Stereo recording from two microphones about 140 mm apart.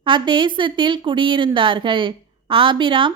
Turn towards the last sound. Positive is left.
turn(degrees=-35)  # may be behind; listen again after turning